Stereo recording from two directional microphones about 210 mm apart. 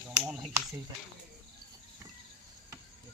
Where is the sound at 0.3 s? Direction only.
5° right (ahead or behind).